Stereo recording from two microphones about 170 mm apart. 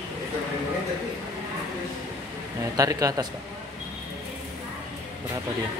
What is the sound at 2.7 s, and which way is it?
Speech, 20° right (ahead or behind).